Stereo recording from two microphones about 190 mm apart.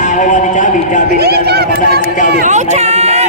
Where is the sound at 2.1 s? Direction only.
40° left (ahead or behind).